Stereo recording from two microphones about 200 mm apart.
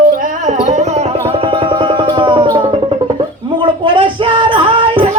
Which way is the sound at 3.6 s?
25° right (ahead or behind).